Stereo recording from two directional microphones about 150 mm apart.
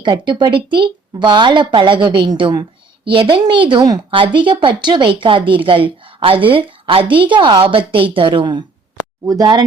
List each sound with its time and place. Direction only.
0.0 s a woman's voice: 30° right (ahead or behind)